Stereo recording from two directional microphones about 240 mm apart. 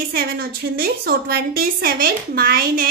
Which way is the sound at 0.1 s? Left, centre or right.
Right.